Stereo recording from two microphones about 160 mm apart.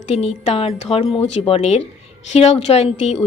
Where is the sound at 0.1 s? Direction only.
40° left (ahead or behind).